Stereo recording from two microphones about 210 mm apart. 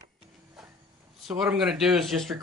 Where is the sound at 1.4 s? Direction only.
5° right (ahead or behind).